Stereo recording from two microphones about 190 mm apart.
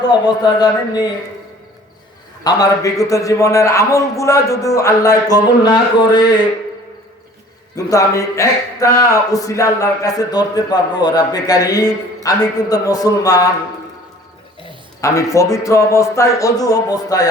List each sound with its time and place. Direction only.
0.1 s speech: 20° left (ahead or behind)
2.4 s a man's voice: 20° left (ahead or behind)
7.8 s speech: 15° left (ahead or behind)
15.0 s a man's voice: 15° left (ahead or behind)